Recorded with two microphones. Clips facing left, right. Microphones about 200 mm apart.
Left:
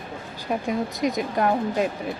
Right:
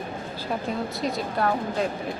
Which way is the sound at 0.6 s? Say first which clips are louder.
Left 5 dB; 15° left (ahead or behind).